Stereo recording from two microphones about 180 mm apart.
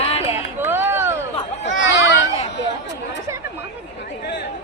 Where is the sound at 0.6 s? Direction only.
10° right (ahead or behind).